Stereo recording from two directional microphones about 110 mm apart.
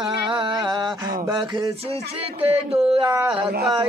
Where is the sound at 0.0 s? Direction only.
45° right (ahead or behind).